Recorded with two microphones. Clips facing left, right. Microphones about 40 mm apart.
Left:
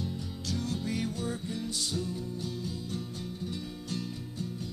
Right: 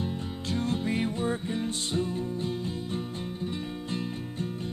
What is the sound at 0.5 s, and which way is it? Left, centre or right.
Music, right.